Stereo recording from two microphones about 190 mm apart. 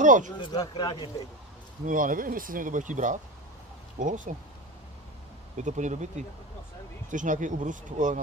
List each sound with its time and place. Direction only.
0.0 s speech: 45° right (ahead or behind)
0.4 s speech: 20° left (ahead or behind)
1.9 s speech: 45° right (ahead or behind)
5.6 s speech: 40° right (ahead or behind)